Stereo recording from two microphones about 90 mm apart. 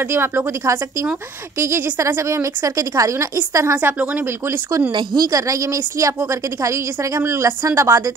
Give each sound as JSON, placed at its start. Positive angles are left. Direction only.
{"t": 0.0, "sound": "speech", "side_deg": -25}
{"t": 1.6, "sound": "a woman's voice", "side_deg": -30}
{"t": 3.8, "sound": "speech", "side_deg": -20}
{"t": 4.5, "sound": "a woman's voice", "side_deg": -35}
{"t": 4.9, "sound": "a woman's voice", "side_deg": -50}